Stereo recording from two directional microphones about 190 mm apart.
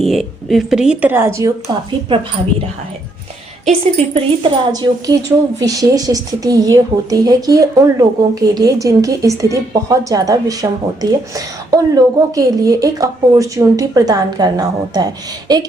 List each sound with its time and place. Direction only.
0.0 s speech: centre (ahead or behind); by 1.7 s 15° right (ahead or behind)
3.7 s a woman's voice: 30° right (ahead or behind)
4.7 s a woman's voice: 20° right (ahead or behind)